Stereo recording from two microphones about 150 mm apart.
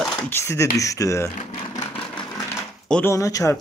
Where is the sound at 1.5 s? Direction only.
45° left (ahead or behind).